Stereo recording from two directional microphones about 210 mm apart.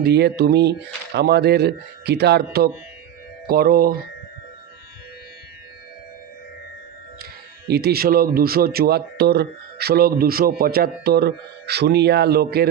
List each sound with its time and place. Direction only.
0.0 s speech: 50° right (ahead or behind)
7.7 s speech: 50° right (ahead or behind)